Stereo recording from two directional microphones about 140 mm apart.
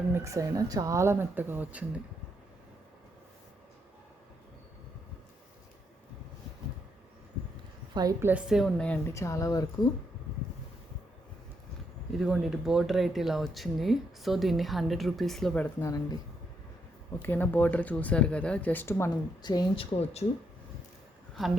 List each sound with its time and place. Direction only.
0.1 s speech: 20° right (ahead or behind)
8.2 s speech: 10° right (ahead or behind); by 9.1 s 10° left (ahead or behind)
9.1 s speech: 20° left (ahead or behind)
12.2 s speech: 5° right (ahead or behind)
15.8 s speech: 25° left (ahead or behind)
17.2 s speech: 15° left (ahead or behind)
19.1 s a woman's voice: 30° left (ahead or behind)
21.4 s speech: centre (ahead or behind)